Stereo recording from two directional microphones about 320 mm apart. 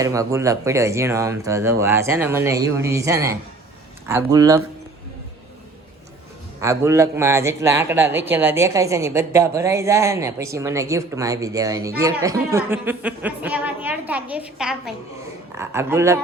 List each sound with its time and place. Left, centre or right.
0.0 s speech: centre
6.6 s a woman's voice: centre